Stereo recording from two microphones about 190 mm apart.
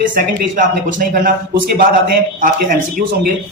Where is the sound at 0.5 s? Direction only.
45° right (ahead or behind).